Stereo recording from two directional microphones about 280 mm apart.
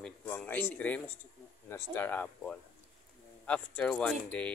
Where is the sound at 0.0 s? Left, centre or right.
Centre.